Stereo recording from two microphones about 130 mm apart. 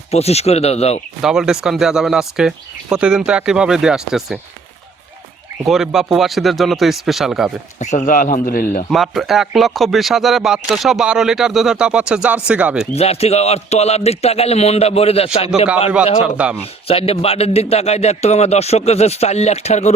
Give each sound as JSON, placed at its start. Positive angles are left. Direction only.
{"t": 0.1, "sound": "a man's voice", "side_deg": 55}
{"t": 1.2, "sound": "speech", "side_deg": -5}
{"t": 5.6, "sound": "speech", "side_deg": 0}
{"t": 7.8, "sound": "a man's voice", "side_deg": 70}
{"t": 8.9, "sound": "speech", "side_deg": 0}
{"t": 12.9, "sound": "a man's voice", "side_deg": 50}
{"t": 16.2, "sound": "speech", "side_deg": -10}
{"t": 16.9, "sound": "a man's voice", "side_deg": 50}